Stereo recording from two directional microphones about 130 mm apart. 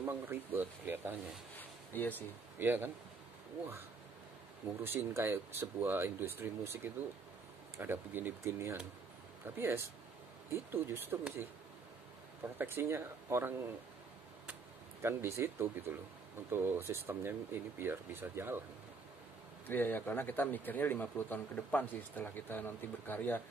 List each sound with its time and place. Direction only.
0.0 s speech: 15° right (ahead or behind)
1.6 s a sound: 15° left (ahead or behind)
2.6 s speech: 15° right (ahead or behind)
4.8 s speech: 20° right (ahead or behind)
12.5 s speech: 20° right (ahead or behind)
14.4 s a sound: 15° right (ahead or behind)
16.4 s speech: 15° right (ahead or behind)
19.7 s speech: 15° left (ahead or behind)